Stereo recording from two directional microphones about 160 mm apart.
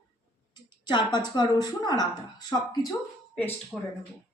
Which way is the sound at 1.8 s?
25° left (ahead or behind).